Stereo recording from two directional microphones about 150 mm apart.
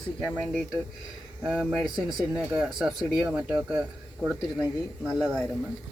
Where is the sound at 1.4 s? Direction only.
5° right (ahead or behind).